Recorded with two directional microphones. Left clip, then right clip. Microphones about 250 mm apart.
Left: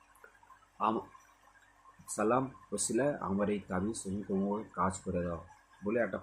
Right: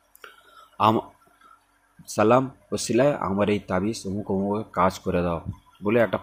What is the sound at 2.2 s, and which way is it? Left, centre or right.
Speech, right.